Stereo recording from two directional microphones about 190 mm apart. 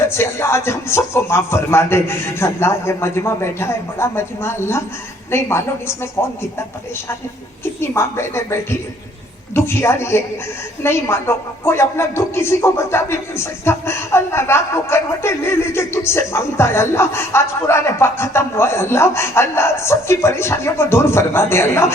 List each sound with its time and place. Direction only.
0.0 s speech: 15° left (ahead or behind)
7.6 s speech: 15° left (ahead or behind)